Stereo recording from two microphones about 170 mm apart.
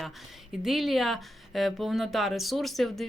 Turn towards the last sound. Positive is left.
turn(degrees=0)  # may be behind; listen again after turning